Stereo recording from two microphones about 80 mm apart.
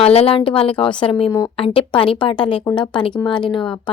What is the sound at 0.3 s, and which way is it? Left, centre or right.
Speech, left.